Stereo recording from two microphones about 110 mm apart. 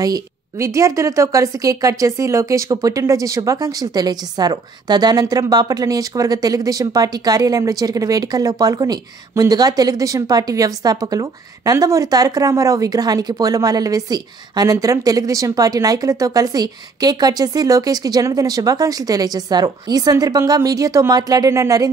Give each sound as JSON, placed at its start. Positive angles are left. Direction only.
{"t": 0.0, "sound": "a woman's voice", "side_deg": -30}